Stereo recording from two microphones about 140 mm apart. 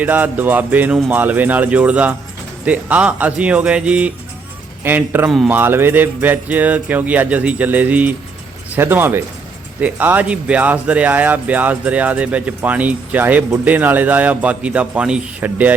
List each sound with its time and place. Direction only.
0.0 s speech: 15° right (ahead or behind)